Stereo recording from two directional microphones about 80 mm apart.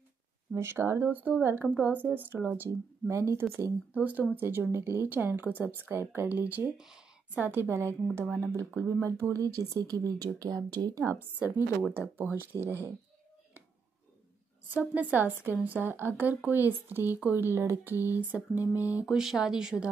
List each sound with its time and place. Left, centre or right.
0.6 s speech: right
3.1 s speech: right
3.9 s speech: centre; by 11.0 s right
11.1 s speech: right
14.7 s speech: centre
19.0 s speech: centre